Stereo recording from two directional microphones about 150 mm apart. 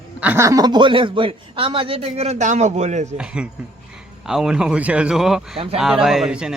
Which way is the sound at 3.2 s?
5° right (ahead or behind).